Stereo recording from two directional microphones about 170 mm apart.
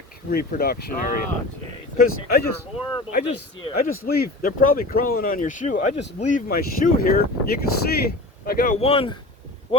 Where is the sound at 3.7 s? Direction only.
60° left (ahead or behind).